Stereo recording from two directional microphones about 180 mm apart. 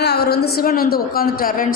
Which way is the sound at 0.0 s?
65° left (ahead or behind).